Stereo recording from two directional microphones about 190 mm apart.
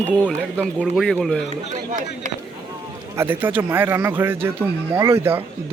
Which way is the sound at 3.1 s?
10° right (ahead or behind).